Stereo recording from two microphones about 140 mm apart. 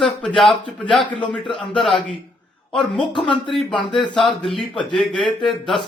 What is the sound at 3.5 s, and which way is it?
A man's voice, 5° left (ahead or behind).